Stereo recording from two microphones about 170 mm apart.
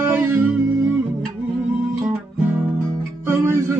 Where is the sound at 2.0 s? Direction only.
10° right (ahead or behind).